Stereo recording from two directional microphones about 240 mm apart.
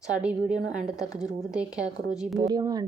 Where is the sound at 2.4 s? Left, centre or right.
Centre.